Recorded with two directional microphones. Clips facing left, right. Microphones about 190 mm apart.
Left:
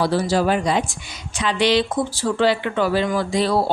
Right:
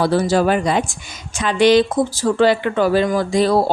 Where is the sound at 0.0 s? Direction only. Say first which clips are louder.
Right 3 dB; 50° right (ahead or behind).